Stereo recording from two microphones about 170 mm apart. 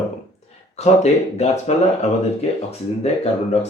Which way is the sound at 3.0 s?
40° left (ahead or behind).